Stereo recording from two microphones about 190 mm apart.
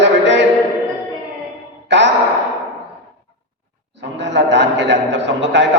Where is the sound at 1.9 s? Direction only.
70° right (ahead or behind).